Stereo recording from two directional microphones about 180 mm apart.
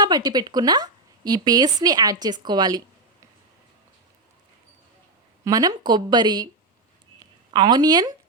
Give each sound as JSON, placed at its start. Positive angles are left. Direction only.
{"t": 0.0, "sound": "a woman's voice", "side_deg": -20}
{"t": 5.5, "sound": "a woman's voice", "side_deg": -20}
{"t": 7.2, "sound": "a sound", "side_deg": -25}